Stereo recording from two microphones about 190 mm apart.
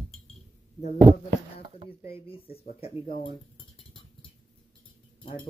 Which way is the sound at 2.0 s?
30° left (ahead or behind).